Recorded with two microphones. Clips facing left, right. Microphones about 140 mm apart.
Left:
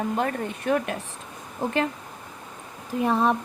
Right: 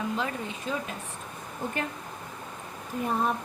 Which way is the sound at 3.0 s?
85° left.